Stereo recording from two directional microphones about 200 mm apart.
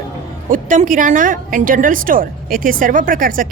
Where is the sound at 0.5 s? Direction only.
40° right (ahead or behind).